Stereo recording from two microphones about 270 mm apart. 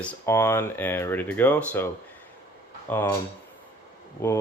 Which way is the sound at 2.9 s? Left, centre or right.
Centre.